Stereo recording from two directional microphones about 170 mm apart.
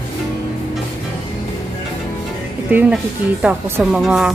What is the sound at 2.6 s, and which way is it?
Speech, 5° right (ahead or behind).